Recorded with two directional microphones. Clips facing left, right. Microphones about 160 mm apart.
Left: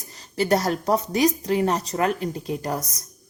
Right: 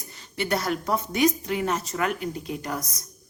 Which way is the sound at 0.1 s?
40° left (ahead or behind).